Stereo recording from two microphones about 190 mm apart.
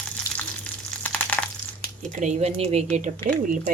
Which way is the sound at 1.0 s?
5° left (ahead or behind).